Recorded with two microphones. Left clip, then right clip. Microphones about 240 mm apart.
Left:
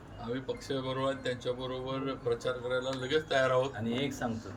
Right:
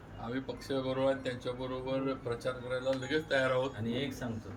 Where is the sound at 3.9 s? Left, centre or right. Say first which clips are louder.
Left 2 dB; centre.